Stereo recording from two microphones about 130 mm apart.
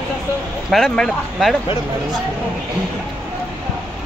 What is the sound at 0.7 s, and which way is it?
Speech, centre (ahead or behind).